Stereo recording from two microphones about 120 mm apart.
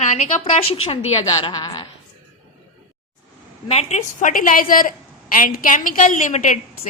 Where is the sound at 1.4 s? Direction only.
35° left (ahead or behind).